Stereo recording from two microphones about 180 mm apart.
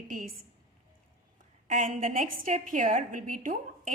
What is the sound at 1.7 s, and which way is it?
A woman's voice, 45° right (ahead or behind).